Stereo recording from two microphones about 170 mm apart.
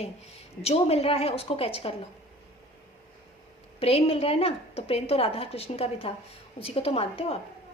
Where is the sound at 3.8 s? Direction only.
35° left (ahead or behind).